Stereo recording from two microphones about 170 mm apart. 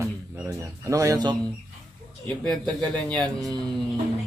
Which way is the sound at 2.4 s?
5° left (ahead or behind).